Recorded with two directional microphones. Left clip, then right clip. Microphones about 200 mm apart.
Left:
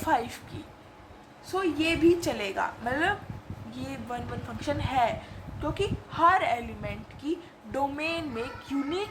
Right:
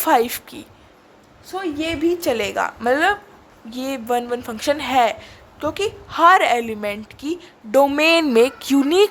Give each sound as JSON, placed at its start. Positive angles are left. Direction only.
{"t": 0.0, "sound": "a woman's voice", "side_deg": -50}